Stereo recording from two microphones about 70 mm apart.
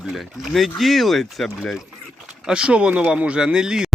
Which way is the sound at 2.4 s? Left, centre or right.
Centre.